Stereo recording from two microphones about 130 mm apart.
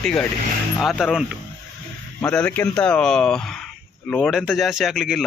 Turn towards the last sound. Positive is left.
turn(degrees=0)  # may be behind; listen again after turning